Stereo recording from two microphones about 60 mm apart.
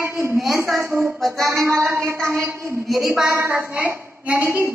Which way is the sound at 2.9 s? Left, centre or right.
Centre.